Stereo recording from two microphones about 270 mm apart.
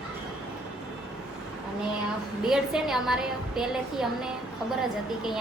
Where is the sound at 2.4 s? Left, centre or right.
Centre.